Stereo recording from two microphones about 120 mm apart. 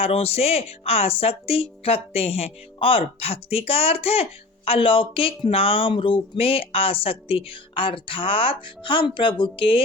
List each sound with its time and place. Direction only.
0.0 s speech: 55° left (ahead or behind)